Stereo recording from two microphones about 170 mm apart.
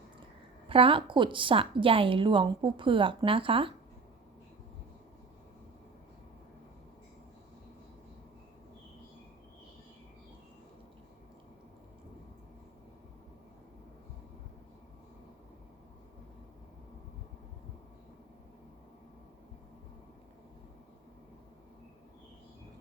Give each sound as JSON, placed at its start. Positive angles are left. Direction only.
{"t": 0.7, "sound": "a woman's voice", "side_deg": -30}